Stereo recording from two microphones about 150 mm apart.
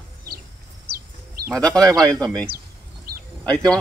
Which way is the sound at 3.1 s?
80° right.